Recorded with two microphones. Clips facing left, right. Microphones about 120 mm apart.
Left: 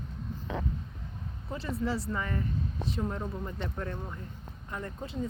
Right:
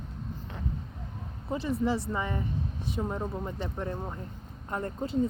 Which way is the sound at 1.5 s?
20° right (ahead or behind).